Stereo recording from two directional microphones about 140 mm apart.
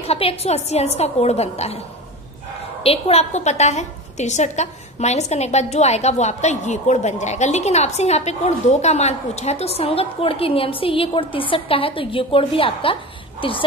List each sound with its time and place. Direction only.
0.0 s a woman's voice: 45° left (ahead or behind)
2.8 s a woman's voice: 45° left (ahead or behind)